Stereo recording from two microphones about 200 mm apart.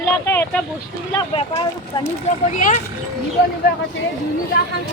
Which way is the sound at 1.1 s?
30° left (ahead or behind).